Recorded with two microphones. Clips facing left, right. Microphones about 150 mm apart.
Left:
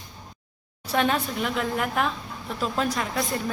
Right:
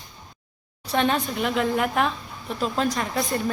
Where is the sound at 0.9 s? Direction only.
5° left (ahead or behind).